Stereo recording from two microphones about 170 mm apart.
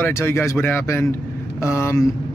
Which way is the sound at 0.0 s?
15° left (ahead or behind).